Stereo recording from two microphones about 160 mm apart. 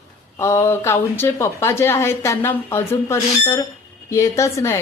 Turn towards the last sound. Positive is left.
turn(degrees=15)  # may be behind; listen again after turning